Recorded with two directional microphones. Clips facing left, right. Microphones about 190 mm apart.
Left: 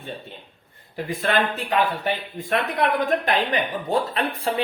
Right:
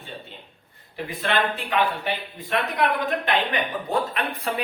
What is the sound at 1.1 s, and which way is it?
Speech, 45° left (ahead or behind).